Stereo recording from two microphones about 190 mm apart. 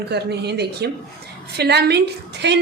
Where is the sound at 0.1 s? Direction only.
60° right (ahead or behind).